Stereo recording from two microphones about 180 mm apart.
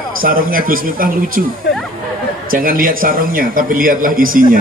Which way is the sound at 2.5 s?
50° right (ahead or behind).